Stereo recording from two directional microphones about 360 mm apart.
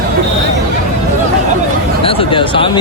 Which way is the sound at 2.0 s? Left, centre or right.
Centre.